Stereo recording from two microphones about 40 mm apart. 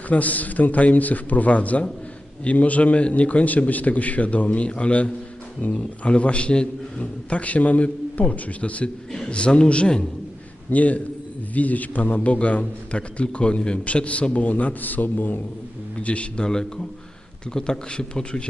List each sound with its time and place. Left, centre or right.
0.1 s a man's voice: left
10.7 s a man's voice: left
16.0 s a man's voice: left
16.4 s a man's voice: centre